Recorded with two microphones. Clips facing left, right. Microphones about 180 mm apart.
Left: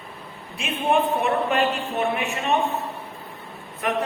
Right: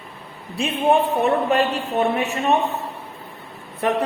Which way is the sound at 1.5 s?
35° right (ahead or behind).